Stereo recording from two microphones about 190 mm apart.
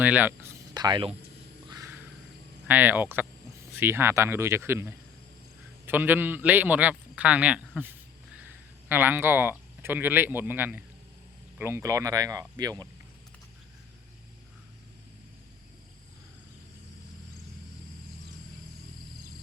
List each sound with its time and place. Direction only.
0.0 s a man's voice: 10° right (ahead or behind)
0.7 s speech: 20° right (ahead or behind)
1.6 s a sound: 20° right (ahead or behind)
2.6 s a man's voice: 10° right (ahead or behind)